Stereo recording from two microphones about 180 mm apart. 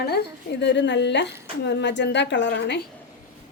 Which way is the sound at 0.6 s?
75° left (ahead or behind).